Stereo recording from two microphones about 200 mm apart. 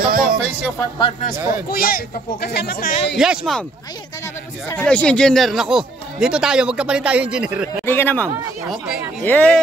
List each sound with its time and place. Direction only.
0.0 s music: 45° right (ahead or behind)
1.5 s speech: 45° left (ahead or behind)
3.2 s speech: centre (ahead or behind)
4.6 s speech: 5° left (ahead or behind)
7.8 s speech: 10° left (ahead or behind)